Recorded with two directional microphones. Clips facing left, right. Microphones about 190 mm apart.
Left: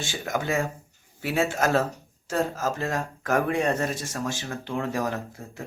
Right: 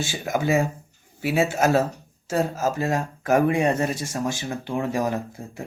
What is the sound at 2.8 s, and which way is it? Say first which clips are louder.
Speech: right 4 dB; 20° right (ahead or behind).